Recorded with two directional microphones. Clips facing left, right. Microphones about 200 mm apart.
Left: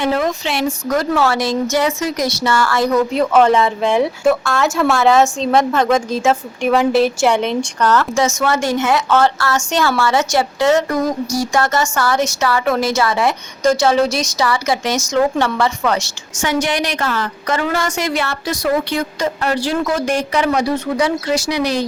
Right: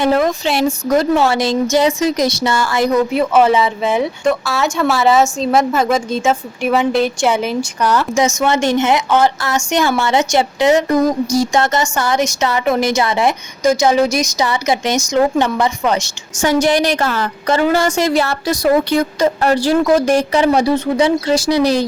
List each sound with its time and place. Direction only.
0.0 s a woman's voice: 40° right (ahead or behind)
1.1 s a woman's voice: 25° right (ahead or behind)
13.6 s a woman's voice: 10° right (ahead or behind)
16.4 s a woman's voice: 35° right (ahead or behind)